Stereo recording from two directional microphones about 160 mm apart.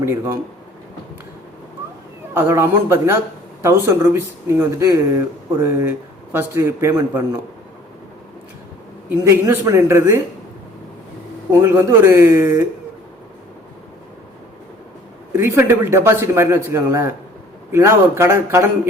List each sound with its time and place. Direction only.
0.0 s speech: 15° right (ahead or behind)
2.3 s speech: 15° right (ahead or behind)
9.0 s speech: 15° right (ahead or behind)
11.5 s speech: 15° right (ahead or behind)
15.3 s speech: 15° right (ahead or behind)